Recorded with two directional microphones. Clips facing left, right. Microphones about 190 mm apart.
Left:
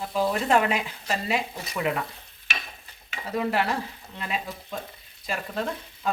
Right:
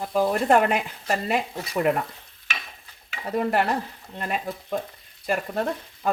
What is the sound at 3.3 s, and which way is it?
Speech, 50° right (ahead or behind).